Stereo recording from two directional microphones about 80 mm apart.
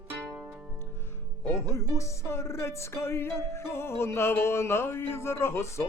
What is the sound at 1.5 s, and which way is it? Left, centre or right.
Speech, left.